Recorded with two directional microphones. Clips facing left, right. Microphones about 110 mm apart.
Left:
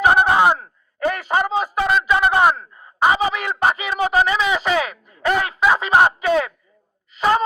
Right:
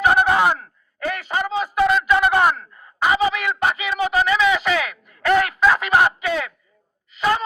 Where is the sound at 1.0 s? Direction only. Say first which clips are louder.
Left 4 dB; 35° left (ahead or behind).